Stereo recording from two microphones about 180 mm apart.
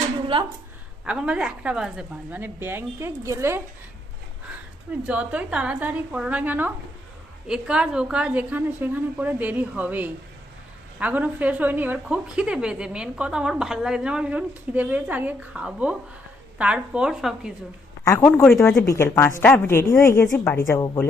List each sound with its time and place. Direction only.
0.3 s a woman's voice: 30° right (ahead or behind)
1.0 s a woman's voice: 5° right (ahead or behind)
5.0 s a woman's voice: 5° right (ahead or behind)
18.0 s a woman's voice: 10° left (ahead or behind)